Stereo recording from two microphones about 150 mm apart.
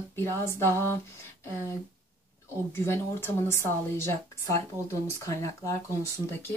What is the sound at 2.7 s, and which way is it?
Speech, 15° left (ahead or behind).